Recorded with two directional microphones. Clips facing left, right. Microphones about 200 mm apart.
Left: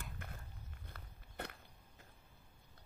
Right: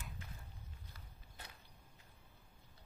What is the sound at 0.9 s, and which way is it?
Walk, 60° left (ahead or behind).